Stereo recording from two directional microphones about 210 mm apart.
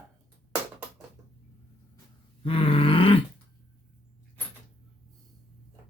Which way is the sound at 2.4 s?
25° left (ahead or behind).